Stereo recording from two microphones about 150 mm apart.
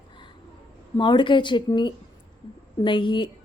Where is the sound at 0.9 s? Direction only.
30° left (ahead or behind).